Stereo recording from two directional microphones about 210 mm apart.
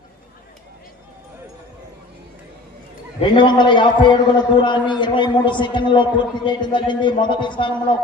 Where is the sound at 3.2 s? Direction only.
20° left (ahead or behind).